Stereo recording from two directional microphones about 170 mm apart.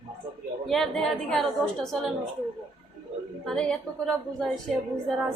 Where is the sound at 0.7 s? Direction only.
Centre (ahead or behind).